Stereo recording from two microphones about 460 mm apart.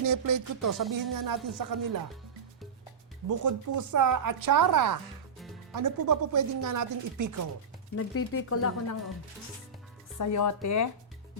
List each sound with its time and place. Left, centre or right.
0.0 s a woman's voice: right
3.2 s a woman's voice: right
7.9 s speech: left
10.2 s speech: left